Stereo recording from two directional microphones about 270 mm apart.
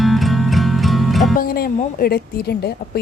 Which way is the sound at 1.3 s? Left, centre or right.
Left.